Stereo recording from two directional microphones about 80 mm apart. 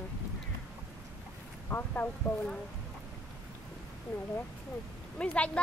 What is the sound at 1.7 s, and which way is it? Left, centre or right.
Speech, left.